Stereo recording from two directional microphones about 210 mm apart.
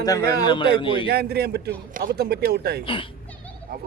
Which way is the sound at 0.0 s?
15° left (ahead or behind).